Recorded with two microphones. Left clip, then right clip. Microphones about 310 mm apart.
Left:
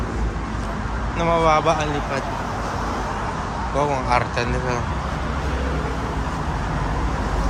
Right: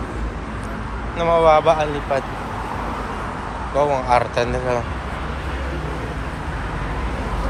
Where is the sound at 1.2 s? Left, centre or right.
Centre.